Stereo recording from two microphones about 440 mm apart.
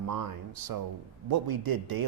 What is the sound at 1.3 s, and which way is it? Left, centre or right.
Speech, right.